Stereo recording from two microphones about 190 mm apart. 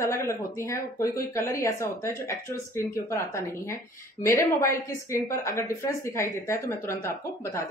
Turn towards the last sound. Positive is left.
turn(degrees=15)  # may be behind; listen again after turning